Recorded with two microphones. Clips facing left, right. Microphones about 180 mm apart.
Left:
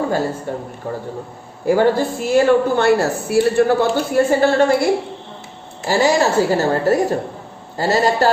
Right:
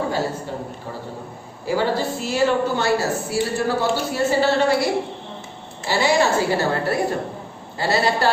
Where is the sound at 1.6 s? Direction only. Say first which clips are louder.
Left 6 dB; 50° left (ahead or behind).